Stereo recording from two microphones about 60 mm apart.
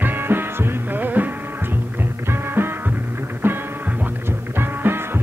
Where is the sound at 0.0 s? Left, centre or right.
Right.